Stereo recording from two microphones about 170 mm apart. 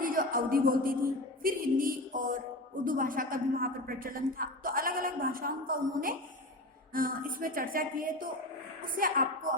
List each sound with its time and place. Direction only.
0.0 s a woman's voice: 55° right (ahead or behind)